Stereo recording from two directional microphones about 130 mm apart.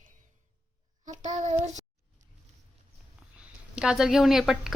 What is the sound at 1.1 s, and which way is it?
Child singing, 70° right (ahead or behind).